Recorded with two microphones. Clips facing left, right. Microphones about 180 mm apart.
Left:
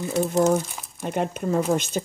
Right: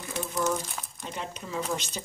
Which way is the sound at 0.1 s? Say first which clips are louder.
Left 9 dB; 40° left (ahead or behind).